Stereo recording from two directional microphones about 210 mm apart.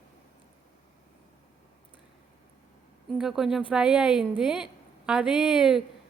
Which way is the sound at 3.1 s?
Centre (ahead or behind).